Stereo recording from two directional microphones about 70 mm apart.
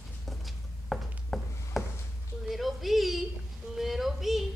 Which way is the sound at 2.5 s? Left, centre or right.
Centre.